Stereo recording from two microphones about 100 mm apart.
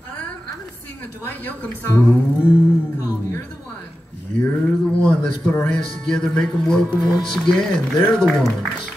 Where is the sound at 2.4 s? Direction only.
15° right (ahead or behind).